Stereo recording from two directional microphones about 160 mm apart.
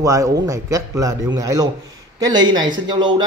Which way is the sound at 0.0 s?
20° right (ahead or behind).